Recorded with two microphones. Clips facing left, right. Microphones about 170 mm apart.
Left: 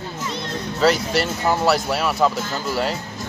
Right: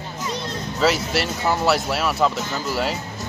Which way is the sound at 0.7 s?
5° right (ahead or behind).